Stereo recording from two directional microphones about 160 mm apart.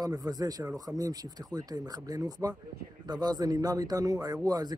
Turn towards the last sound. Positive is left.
turn(degrees=-25)  # may be behind; listen again after turning